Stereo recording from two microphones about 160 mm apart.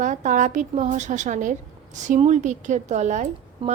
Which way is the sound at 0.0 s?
50° right (ahead or behind).